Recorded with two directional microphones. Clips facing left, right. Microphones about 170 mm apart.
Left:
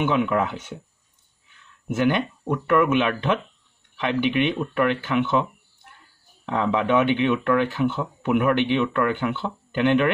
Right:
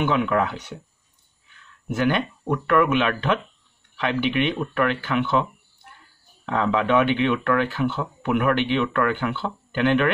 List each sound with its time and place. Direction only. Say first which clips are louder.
0.1 s speech: even; 20° left (ahead or behind)
1.9 s speech: left 1 dB; 20° left (ahead or behind)
6.4 s speech: even; 15° left (ahead or behind)